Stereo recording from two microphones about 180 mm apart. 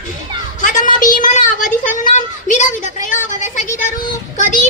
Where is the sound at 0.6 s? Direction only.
45° left (ahead or behind).